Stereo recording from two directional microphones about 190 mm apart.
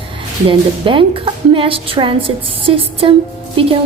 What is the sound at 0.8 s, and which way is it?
A woman's voice, 25° right (ahead or behind).